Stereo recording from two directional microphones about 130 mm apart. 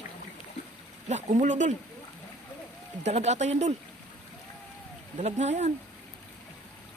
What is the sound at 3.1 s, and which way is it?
Speech, 60° right (ahead or behind).